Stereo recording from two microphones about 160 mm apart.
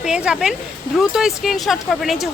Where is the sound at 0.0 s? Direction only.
5° right (ahead or behind).